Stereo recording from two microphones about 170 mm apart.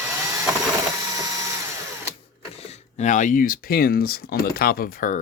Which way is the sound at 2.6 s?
45° left (ahead or behind).